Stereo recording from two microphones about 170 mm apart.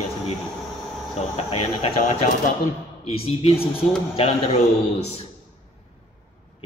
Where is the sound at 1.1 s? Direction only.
35° left (ahead or behind).